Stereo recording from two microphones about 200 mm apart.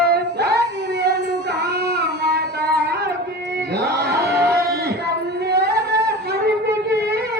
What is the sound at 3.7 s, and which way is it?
Music, 55° right (ahead or behind).